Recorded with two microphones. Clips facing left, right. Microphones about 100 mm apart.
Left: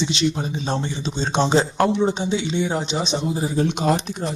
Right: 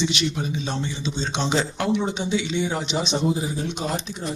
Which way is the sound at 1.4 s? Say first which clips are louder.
Left 7 dB; 40° left (ahead or behind).